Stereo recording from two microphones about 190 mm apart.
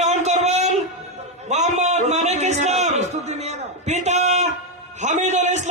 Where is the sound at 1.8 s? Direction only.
35° right (ahead or behind).